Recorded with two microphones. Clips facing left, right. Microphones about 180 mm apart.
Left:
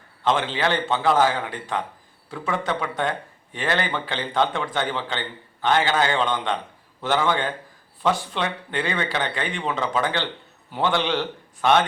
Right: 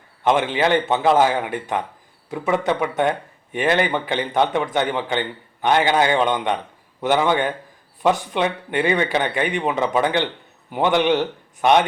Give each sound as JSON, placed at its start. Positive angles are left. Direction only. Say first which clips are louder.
{"t": 0.3, "sound": "a man's voice", "louder": "right 4 dB", "side_deg": -15}